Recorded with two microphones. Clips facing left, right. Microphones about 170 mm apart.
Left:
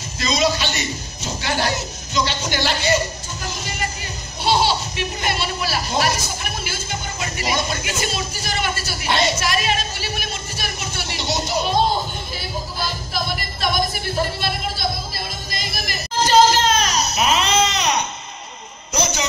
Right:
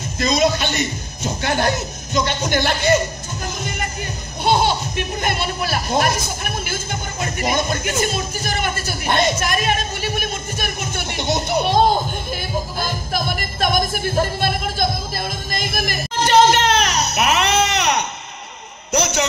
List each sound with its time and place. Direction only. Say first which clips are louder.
0.2 s a man's voice: right 3 dB; 50° right (ahead or behind)
4.5 s a sound: right 1 dB; 50° right (ahead or behind); by 18.0 s 65° right (ahead or behind)
18.9 s a man's voice: right 4 dB; 65° right (ahead or behind)